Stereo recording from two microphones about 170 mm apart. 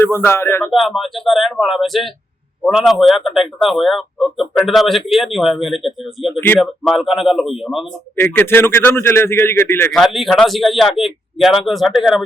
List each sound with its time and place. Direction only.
0.0 s a man's voice: 10° left (ahead or behind)
0.7 s speech: centre (ahead or behind)
8.1 s a man's voice: 10° left (ahead or behind)
10.0 s speech: centre (ahead or behind)